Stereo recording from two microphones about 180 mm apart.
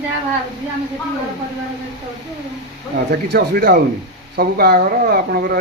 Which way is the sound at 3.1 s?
60° right (ahead or behind).